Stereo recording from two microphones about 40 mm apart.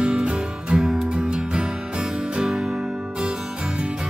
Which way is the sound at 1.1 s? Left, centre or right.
Right.